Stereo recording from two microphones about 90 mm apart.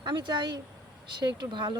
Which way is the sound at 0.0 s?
60° right (ahead or behind).